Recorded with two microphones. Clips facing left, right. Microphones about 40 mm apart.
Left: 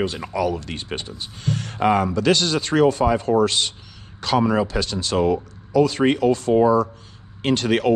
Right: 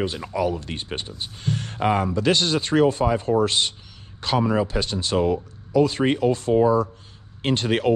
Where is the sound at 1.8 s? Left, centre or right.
Left.